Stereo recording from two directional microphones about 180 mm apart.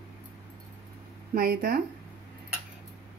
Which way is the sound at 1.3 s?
55° right (ahead or behind).